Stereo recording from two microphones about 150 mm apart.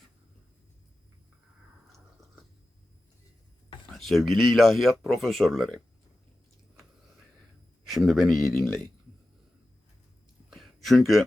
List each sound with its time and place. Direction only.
3.9 s speech: centre (ahead or behind)
7.9 s speech: centre (ahead or behind)
10.5 s a sound: centre (ahead or behind)